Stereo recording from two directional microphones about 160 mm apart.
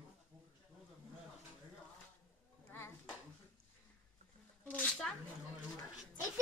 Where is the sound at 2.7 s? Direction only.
15° left (ahead or behind).